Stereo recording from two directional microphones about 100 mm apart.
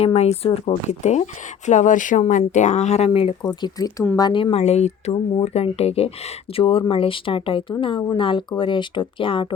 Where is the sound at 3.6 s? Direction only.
35° left (ahead or behind); by 6.1 s 85° left.